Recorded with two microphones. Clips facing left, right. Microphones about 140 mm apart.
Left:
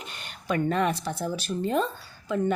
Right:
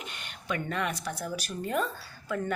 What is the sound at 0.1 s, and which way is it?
Speech, 35° left (ahead or behind).